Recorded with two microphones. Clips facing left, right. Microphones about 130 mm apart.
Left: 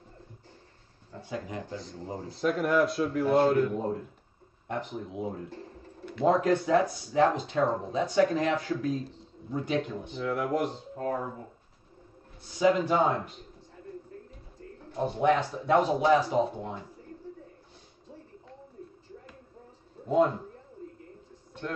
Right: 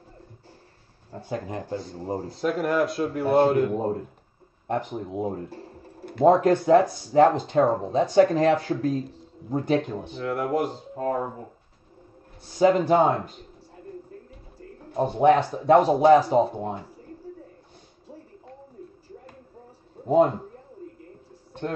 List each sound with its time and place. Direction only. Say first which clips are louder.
1.1 s speech: right 5 dB; 40° right (ahead or behind)
2.3 s a man's voice: right 1 dB; centre (ahead or behind)
3.2 s a man's voice: right 3 dB; 55° right (ahead or behind)
3.7 s a man's voice: right 5 dB; 45° right (ahead or behind)
10.0 s a man's voice: right 3 dB; centre (ahead or behind)
10.6 s speech: right 4 dB; 45° right (ahead or behind)
12.5 s speech: right 5 dB; 40° right (ahead or behind)
15.0 s speech: right 6 dB; 50° right (ahead or behind)
15.3 s speech: right 7 dB; 35° right (ahead or behind)
15.8 s speech: right 7 dB; 50° right (ahead or behind)
20.1 s speech: right 5 dB; 55° right (ahead or behind)